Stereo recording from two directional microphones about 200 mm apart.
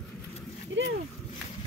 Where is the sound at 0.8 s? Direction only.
70° right (ahead or behind).